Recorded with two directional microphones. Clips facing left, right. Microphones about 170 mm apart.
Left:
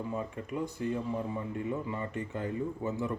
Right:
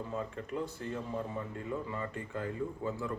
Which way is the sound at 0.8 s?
15° left (ahead or behind).